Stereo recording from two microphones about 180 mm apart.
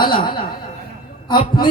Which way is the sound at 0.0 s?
25° left (ahead or behind).